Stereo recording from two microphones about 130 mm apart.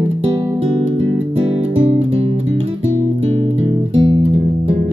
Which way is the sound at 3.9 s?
35° right (ahead or behind).